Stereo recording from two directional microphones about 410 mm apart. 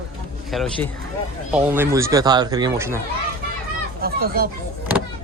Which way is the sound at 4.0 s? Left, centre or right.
Right.